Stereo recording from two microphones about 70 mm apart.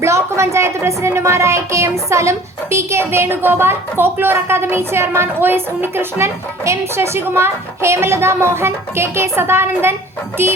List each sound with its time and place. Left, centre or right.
0.0 s speech: right